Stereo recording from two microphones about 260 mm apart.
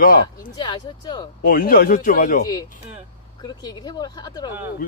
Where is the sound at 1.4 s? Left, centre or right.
Left.